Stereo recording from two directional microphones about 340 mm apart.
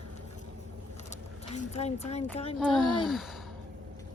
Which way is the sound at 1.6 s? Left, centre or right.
Centre.